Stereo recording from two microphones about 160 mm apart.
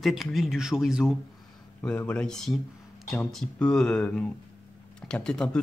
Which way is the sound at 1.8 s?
5° left (ahead or behind).